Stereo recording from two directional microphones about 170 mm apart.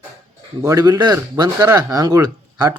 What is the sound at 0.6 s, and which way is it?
Speech, 20° right (ahead or behind).